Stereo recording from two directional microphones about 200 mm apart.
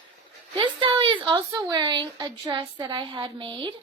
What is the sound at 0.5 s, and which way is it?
Speech, 25° right (ahead or behind).